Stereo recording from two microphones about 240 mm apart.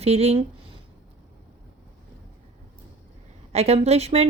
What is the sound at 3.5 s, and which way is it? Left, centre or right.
Speech, right.